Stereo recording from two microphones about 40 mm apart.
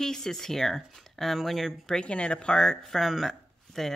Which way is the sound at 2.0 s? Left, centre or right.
Left.